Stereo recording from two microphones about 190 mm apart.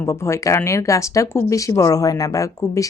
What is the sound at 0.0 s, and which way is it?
Speech, 15° left (ahead or behind).